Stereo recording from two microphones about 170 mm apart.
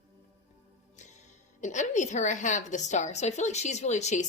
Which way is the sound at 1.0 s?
45° left (ahead or behind).